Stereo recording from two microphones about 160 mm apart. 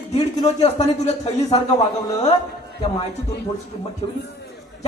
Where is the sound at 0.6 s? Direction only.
40° left (ahead or behind).